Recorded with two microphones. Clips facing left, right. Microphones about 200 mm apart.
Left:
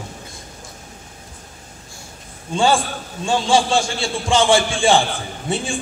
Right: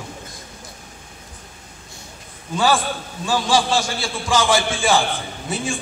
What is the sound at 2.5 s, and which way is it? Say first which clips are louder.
A man's voice: left 2 dB; 25° left (ahead or behind).